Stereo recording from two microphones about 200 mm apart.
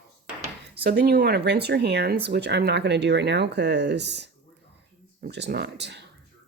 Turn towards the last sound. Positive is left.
turn(degrees=-60)  # may be behind; listen again after turning